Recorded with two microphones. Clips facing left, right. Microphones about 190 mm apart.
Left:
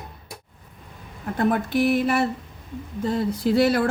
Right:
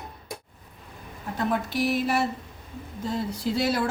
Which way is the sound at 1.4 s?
55° left (ahead or behind).